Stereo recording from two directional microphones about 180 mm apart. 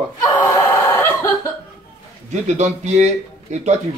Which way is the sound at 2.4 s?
40° right (ahead or behind).